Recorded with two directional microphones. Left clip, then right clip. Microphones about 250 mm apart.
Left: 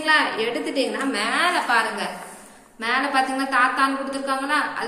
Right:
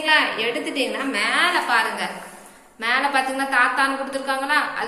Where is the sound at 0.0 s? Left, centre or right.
Centre.